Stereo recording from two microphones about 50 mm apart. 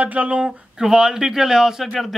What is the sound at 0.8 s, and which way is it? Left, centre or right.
Speech, centre.